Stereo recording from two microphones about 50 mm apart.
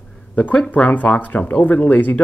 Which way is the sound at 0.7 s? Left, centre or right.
Left.